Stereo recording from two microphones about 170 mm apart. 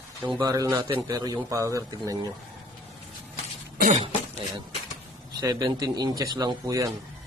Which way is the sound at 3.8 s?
45° right (ahead or behind).